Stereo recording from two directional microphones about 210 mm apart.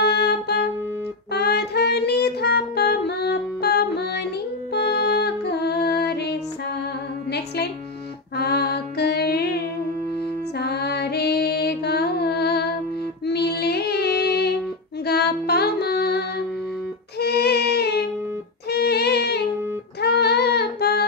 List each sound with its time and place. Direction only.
0.0 s music: 50° left (ahead or behind)
1.3 s child singing: 50° left (ahead or behind)
4.7 s music: 50° left (ahead or behind)
10.6 s music: 50° left (ahead or behind)
13.2 s child singing: 50° left (ahead or behind)
15.0 s music: 50° left (ahead or behind)
17.2 s a sound: 50° left (ahead or behind)
18.7 s music: 50° left (ahead or behind)
20.0 s child singing: 50° left (ahead or behind)